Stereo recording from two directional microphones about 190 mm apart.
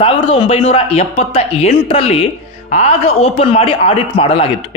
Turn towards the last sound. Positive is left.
turn(degrees=30)  # may be behind; listen again after turning